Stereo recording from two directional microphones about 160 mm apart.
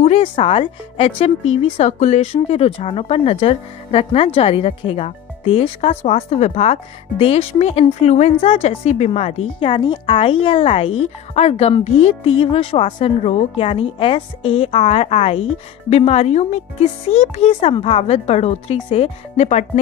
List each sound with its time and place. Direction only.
0.0 s speech: 40° left (ahead or behind)